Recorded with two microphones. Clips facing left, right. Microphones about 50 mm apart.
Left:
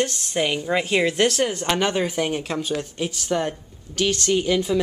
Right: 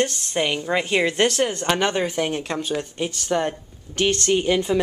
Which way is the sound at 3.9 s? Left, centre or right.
Right.